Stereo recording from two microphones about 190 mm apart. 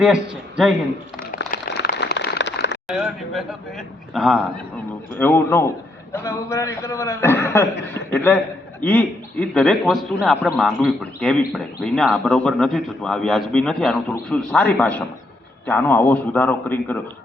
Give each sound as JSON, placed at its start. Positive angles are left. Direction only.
{"t": 0.0, "sound": "a man's voice", "side_deg": -5}
{"t": 1.5, "sound": "a sound", "side_deg": 60}
{"t": 2.8, "sound": "a man's voice", "side_deg": -5}